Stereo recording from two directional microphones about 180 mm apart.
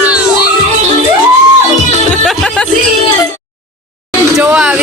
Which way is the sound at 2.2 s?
5° left (ahead or behind).